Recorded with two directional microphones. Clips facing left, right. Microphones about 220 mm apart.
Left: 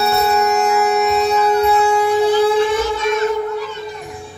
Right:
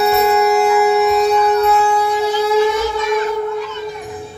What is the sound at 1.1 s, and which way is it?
Wind instrument, 5° left (ahead or behind).